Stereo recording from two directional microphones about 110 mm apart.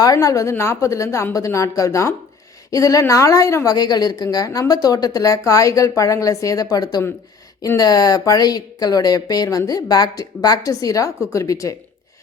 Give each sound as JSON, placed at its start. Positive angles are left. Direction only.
{"t": 0.0, "sound": "a woman's voice", "side_deg": 30}